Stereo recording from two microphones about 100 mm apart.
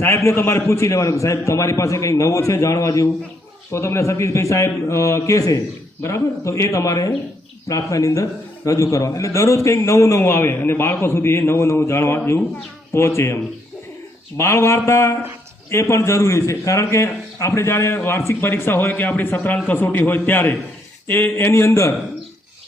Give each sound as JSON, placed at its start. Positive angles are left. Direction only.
{"t": 0.0, "sound": "a man's voice", "side_deg": 25}